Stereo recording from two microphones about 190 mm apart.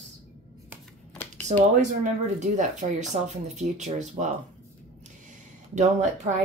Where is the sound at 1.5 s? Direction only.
40° right (ahead or behind).